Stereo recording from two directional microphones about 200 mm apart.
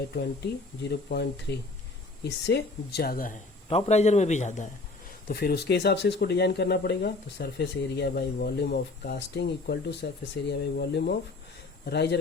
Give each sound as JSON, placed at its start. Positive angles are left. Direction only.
{"t": 0.8, "sound": "speech", "side_deg": 55}
{"t": 3.7, "sound": "a man's voice", "side_deg": 30}
{"t": 5.3, "sound": "speech", "side_deg": 50}